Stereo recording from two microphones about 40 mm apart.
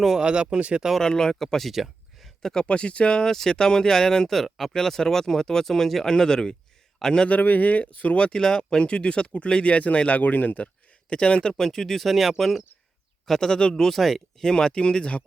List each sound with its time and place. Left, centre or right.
0.2 s speech: right
1.0 s speech: centre
1.7 s a sound: centre
2.4 s speech: centre
2.6 s speech: left
3.2 s speech: centre
7.3 s speech: left
8.2 s speech: left
8.8 s speech: left
11.1 s speech: left; by 13.5 s centre
13.5 s speech: centre
13.8 s speech: centre
14.4 s speech: centre